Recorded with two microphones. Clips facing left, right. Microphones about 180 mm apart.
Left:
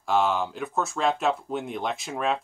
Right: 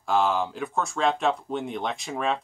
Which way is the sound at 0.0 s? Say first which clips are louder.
Even; centre (ahead or behind).